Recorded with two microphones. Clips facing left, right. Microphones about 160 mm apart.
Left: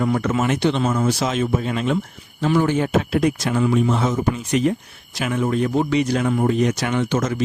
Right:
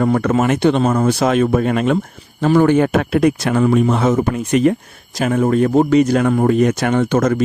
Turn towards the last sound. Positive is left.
turn(degrees=-55)  # may be behind; listen again after turning